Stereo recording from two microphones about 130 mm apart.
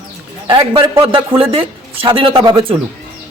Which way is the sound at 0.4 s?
45° right (ahead or behind).